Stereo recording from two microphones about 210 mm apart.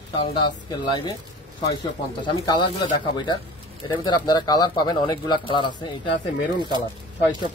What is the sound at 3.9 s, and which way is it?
Speech, 20° left (ahead or behind).